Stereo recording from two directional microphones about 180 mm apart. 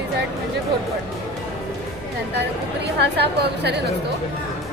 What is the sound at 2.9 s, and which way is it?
Speech, 70° right (ahead or behind).